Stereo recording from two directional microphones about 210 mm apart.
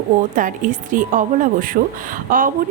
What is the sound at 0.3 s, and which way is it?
A woman's voice, 40° right (ahead or behind).